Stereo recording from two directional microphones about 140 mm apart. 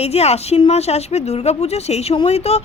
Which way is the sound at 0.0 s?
50° left (ahead or behind).